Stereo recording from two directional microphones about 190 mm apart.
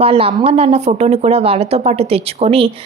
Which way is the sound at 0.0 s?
30° right (ahead or behind).